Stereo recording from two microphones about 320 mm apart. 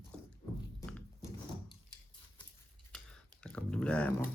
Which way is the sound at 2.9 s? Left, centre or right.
Centre.